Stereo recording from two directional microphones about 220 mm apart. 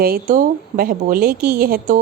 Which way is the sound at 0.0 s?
40° right (ahead or behind).